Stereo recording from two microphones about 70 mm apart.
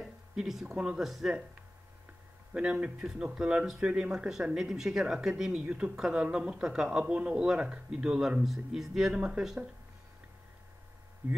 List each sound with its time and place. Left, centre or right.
0.0 s speech: centre
2.5 s speech: centre
6.5 s speech: centre